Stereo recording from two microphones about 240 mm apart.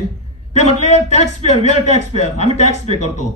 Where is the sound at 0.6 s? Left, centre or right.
Left.